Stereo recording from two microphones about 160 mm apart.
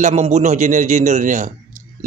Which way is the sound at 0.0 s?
45° right (ahead or behind).